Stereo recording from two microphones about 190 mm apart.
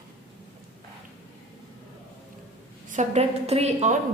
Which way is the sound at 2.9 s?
35° right (ahead or behind).